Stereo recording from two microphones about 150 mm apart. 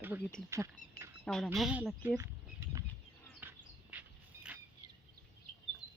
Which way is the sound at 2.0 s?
15° right (ahead or behind).